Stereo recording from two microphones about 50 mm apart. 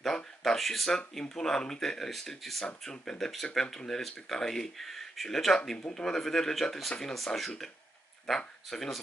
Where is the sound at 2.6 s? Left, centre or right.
Centre.